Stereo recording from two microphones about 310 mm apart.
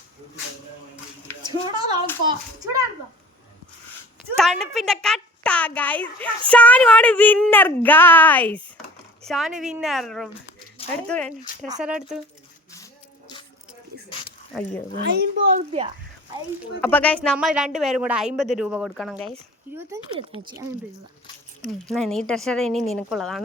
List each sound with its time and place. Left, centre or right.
1.4 s a sound: centre
2.2 s speech: centre
4.4 s a child's voice: centre
10.8 s a sound: centre
11.7 s a child's voice: centre
12.7 s a sound: centre
14.9 s a child's voice: right
16.8 s a child's voice: centre
21.8 s a child's voice: centre